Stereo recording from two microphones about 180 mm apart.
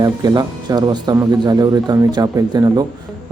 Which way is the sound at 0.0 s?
25° right (ahead or behind).